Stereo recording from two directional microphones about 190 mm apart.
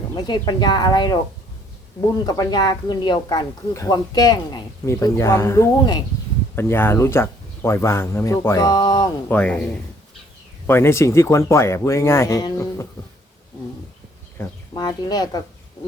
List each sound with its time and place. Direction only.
0.1 s speech: 20° left (ahead or behind)
2.2 s speech: 20° left (ahead or behind)
9.3 s speech: 5° left (ahead or behind)
10.7 s speech: 15° left (ahead or behind)
14.3 s speech: 20° left (ahead or behind)